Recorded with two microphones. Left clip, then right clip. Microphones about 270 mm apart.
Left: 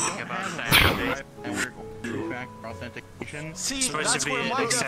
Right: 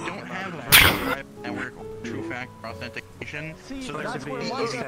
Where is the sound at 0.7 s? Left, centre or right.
Centre.